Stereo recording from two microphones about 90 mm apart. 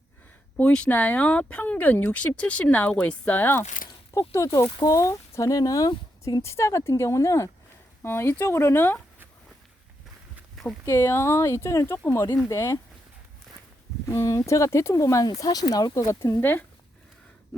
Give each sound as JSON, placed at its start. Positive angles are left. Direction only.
{"t": 0.5, "sound": "speech", "side_deg": 10}
{"t": 4.1, "sound": "speech", "side_deg": 35}
{"t": 6.4, "sound": "speech", "side_deg": 30}
{"t": 10.8, "sound": "speech", "side_deg": 30}
{"t": 12.5, "sound": "speech", "side_deg": 40}
{"t": 14.1, "sound": "speech", "side_deg": 35}
{"t": 16.2, "sound": "speech", "side_deg": 25}